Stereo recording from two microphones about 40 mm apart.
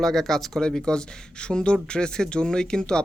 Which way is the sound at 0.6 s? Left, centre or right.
Left.